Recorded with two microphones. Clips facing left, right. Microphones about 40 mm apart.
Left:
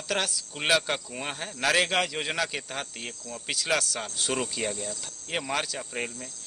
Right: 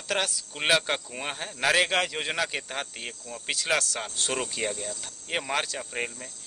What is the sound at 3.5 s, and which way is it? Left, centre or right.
Speech, centre.